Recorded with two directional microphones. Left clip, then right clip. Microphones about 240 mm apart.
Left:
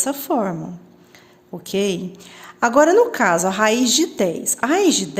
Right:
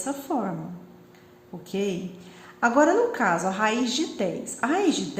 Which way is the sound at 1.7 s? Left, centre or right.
Left.